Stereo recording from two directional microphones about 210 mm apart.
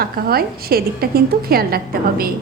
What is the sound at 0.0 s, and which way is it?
A woman's voice, 45° right (ahead or behind).